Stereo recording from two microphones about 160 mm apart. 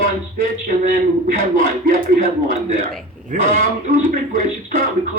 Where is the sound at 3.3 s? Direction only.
50° right (ahead or behind).